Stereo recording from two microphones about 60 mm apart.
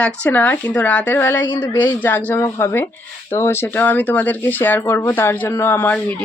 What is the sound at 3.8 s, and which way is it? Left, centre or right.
Speech, left.